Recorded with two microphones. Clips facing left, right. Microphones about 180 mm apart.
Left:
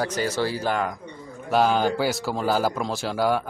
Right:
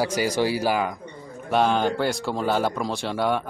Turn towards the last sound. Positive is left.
turn(degrees=0)  # may be behind; listen again after turning